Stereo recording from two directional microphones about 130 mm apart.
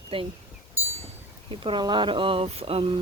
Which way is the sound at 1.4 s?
40° right (ahead or behind).